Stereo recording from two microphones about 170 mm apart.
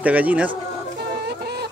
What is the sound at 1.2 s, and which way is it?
Chicken, 75° right (ahead or behind).